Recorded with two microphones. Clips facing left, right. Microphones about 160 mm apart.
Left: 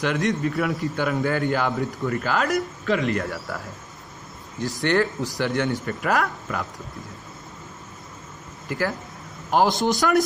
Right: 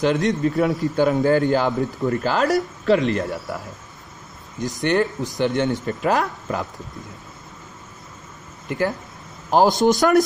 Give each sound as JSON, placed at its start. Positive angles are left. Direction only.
{"t": 0.0, "sound": "a man's voice", "side_deg": -25}
{"t": 8.6, "sound": "speech", "side_deg": -25}
{"t": 9.8, "sound": "speech", "side_deg": -45}